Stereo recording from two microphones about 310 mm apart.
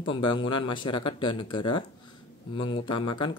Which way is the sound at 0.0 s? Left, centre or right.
Centre.